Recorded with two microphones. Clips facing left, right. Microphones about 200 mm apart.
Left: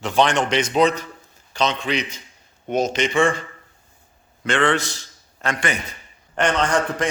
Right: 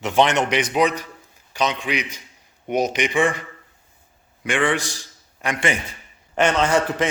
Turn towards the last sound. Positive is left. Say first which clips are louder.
# right 2 dB
turn(degrees=-5)  # may be behind; listen again after turning